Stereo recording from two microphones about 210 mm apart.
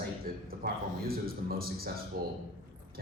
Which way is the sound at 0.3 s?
45° right (ahead or behind).